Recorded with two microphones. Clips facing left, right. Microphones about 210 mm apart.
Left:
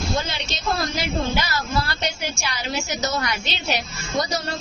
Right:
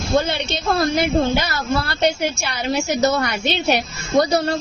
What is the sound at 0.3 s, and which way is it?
A woman's voice, 60° right (ahead or behind).